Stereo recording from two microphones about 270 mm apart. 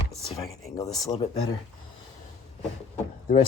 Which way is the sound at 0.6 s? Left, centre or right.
Centre.